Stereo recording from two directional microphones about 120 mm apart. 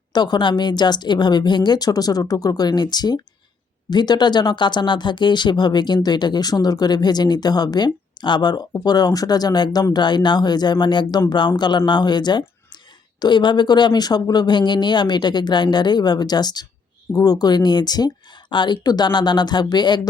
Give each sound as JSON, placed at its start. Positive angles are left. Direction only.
{"t": 0.1, "sound": "speech", "side_deg": 35}